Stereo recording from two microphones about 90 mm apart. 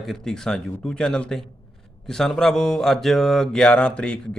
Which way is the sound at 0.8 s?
5° left (ahead or behind).